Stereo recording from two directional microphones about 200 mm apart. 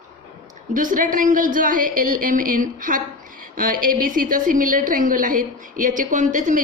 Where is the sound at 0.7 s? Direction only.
40° right (ahead or behind).